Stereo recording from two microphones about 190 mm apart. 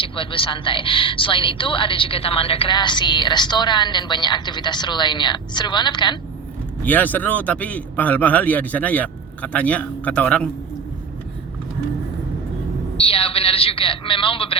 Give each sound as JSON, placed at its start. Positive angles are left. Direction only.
{"t": 0.0, "sound": "a woman's voice", "side_deg": 25}
{"t": 6.8, "sound": "speech", "side_deg": 10}
{"t": 13.0, "sound": "a woman's voice", "side_deg": 30}